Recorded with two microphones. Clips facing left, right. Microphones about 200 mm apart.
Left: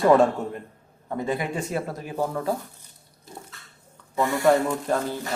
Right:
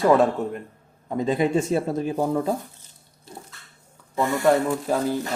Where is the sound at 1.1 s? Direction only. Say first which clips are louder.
Right 6 dB; 20° right (ahead or behind).